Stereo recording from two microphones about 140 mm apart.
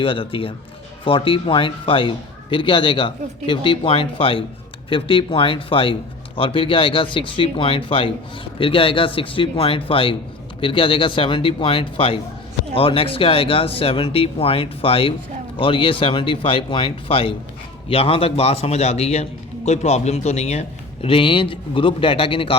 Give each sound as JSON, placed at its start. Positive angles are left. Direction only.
{"t": 0.0, "sound": "a man's voice", "side_deg": 40}